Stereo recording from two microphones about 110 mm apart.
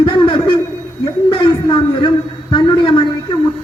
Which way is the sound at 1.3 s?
45° left (ahead or behind).